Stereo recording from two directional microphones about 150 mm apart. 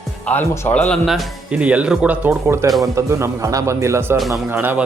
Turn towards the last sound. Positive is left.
turn(degrees=-15)  # may be behind; listen again after turning